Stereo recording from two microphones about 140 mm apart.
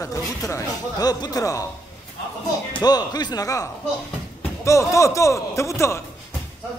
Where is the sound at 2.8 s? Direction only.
30° left (ahead or behind).